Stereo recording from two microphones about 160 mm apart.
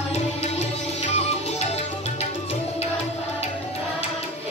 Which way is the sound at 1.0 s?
45° left (ahead or behind).